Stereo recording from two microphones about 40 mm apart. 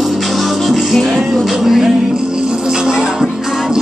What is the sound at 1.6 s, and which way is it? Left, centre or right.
Music, centre.